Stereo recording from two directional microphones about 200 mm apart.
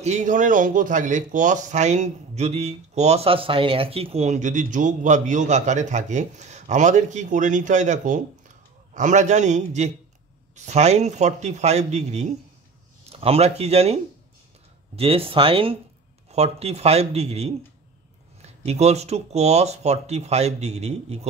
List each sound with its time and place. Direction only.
0.0 s a man's voice: 35° right (ahead or behind)
15.0 s a man's voice: 30° right (ahead or behind)
18.7 s a man's voice: 30° right (ahead or behind)